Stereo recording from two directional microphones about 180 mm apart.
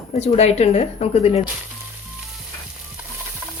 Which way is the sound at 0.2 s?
35° left (ahead or behind).